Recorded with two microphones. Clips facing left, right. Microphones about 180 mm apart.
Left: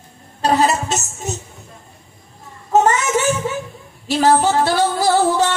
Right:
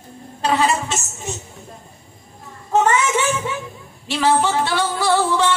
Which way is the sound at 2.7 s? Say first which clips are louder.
Left 2 dB; 40° left (ahead or behind).